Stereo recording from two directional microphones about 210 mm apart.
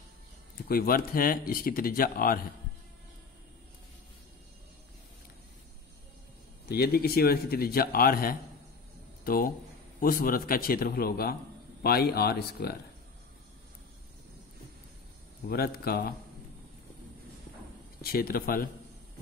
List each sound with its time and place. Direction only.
0.7 s speech: 45° left (ahead or behind)
6.7 s speech: 50° left (ahead or behind)
15.4 s speech: 45° left (ahead or behind)
18.0 s speech: 45° left (ahead or behind)